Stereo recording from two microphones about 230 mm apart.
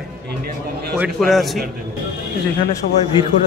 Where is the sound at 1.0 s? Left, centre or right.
Centre.